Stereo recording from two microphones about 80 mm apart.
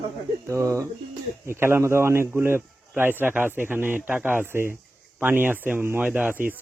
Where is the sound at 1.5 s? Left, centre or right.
Right.